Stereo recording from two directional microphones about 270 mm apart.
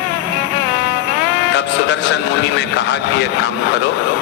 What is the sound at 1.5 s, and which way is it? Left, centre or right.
Music, left.